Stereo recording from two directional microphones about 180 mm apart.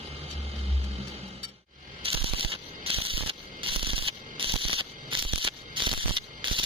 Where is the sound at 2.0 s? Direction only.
30° right (ahead or behind).